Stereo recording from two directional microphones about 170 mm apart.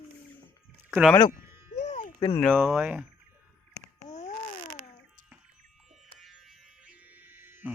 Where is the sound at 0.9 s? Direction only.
Centre (ahead or behind).